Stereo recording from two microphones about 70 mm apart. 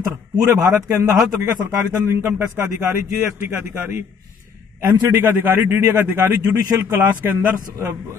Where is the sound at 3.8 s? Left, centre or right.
Right.